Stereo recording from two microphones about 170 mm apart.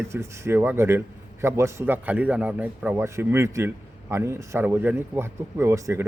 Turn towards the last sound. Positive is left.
turn(degrees=-15)  # may be behind; listen again after turning